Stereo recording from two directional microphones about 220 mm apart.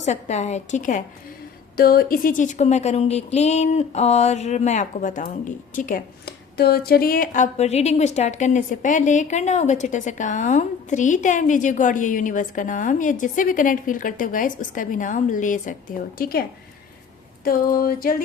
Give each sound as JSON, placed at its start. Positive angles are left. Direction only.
{"t": 0.0, "sound": "speech", "side_deg": 30}
{"t": 17.4, "sound": "speech", "side_deg": 40}